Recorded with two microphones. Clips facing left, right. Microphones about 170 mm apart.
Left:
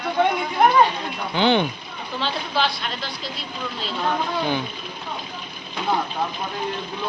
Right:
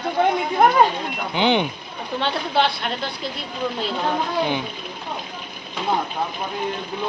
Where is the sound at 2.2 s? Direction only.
60° right (ahead or behind).